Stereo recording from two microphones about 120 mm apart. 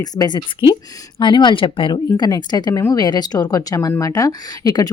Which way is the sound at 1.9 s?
35° left (ahead or behind).